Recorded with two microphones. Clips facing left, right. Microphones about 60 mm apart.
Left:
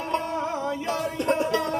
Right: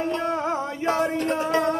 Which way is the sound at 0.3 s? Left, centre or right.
Right.